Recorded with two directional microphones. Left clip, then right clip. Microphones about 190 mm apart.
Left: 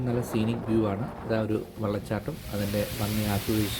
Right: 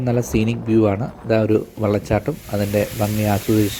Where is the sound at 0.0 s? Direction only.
35° right (ahead or behind).